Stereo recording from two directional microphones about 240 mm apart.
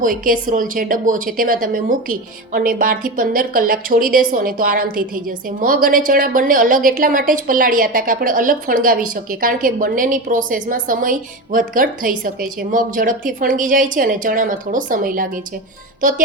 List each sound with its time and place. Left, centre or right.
0.0 s a woman's voice: right
16.0 s music: right